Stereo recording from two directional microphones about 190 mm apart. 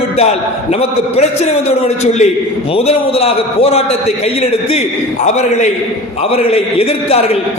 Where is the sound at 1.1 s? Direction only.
35° left (ahead or behind).